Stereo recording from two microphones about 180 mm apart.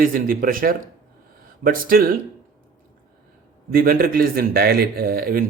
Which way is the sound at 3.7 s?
55° right (ahead or behind).